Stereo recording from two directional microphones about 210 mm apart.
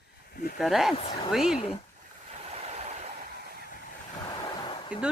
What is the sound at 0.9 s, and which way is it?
Speech, 25° left (ahead or behind).